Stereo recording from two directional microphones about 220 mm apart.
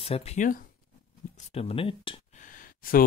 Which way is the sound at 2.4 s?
40° left (ahead or behind).